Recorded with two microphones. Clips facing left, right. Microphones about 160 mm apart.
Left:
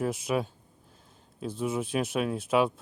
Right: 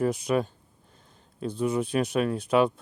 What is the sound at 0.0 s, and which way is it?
Speech, centre (ahead or behind).